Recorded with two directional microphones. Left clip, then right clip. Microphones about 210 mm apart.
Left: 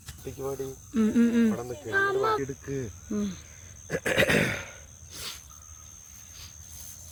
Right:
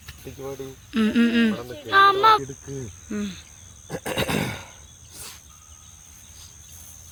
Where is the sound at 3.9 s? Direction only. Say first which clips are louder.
Left 3 dB; 40° right (ahead or behind).